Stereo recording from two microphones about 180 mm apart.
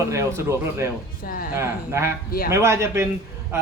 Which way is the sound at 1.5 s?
15° right (ahead or behind).